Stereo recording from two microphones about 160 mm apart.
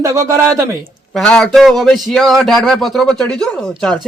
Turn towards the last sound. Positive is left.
turn(degrees=5)  # may be behind; listen again after turning